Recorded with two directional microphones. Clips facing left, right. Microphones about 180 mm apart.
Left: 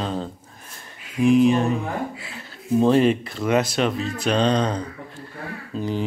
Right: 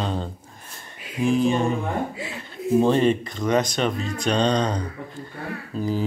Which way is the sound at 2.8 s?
5° left (ahead or behind).